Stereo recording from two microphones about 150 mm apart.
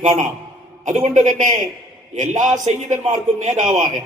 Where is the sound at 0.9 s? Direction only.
55° right (ahead or behind).